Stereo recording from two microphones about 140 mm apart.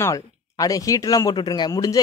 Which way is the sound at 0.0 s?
25° left (ahead or behind).